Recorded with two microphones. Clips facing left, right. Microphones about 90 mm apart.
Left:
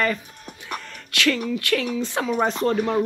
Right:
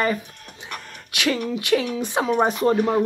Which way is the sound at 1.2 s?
20° right (ahead or behind).